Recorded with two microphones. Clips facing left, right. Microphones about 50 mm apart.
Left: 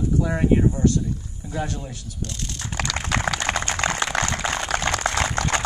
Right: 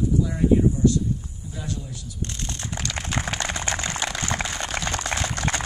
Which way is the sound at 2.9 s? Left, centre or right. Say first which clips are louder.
Left 4 dB; left.